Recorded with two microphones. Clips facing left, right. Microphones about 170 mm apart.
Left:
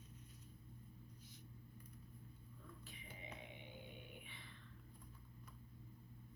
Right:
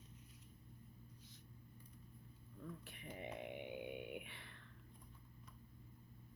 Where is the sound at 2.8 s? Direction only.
60° right (ahead or behind).